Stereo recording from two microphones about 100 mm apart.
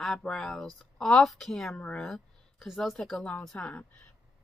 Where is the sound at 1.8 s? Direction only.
15° left (ahead or behind).